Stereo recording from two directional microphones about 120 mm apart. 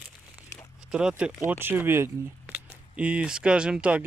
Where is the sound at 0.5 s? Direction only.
25° left (ahead or behind).